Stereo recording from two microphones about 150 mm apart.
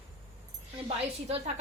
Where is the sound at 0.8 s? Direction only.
40° right (ahead or behind).